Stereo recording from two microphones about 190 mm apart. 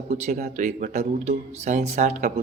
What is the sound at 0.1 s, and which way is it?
Speech, 50° right (ahead or behind).